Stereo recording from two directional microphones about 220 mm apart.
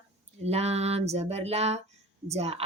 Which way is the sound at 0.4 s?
30° right (ahead or behind).